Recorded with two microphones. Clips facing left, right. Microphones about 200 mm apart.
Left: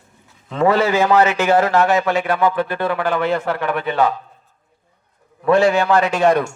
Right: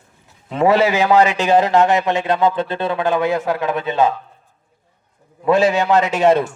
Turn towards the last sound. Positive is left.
turn(degrees=-20)  # may be behind; listen again after turning